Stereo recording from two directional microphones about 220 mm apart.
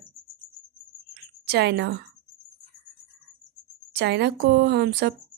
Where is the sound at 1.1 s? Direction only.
50° right (ahead or behind).